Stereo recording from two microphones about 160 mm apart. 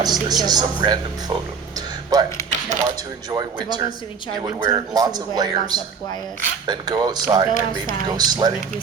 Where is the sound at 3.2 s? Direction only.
25° right (ahead or behind).